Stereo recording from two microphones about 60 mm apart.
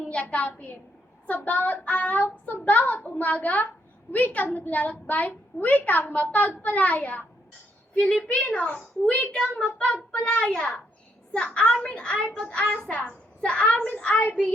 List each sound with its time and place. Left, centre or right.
0.1 s a woman's voice: left
8.3 s a child's voice: centre
9.3 s a child's voice: centre